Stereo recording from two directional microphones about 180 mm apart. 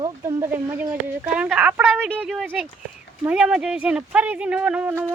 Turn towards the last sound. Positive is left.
turn(degrees=-10)  # may be behind; listen again after turning